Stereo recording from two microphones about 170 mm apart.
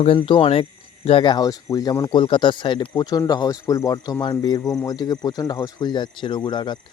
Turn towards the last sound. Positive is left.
turn(degrees=25)  # may be behind; listen again after turning